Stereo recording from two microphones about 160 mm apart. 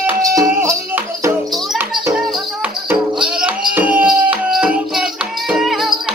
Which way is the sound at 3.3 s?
5° right (ahead or behind).